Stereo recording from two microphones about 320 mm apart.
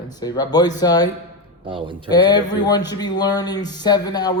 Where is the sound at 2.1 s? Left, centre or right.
Centre.